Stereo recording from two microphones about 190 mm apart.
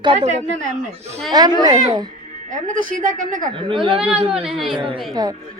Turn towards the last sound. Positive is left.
turn(degrees=-20)  # may be behind; listen again after turning